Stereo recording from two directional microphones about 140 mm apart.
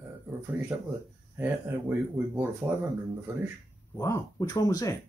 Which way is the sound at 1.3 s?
15° right (ahead or behind).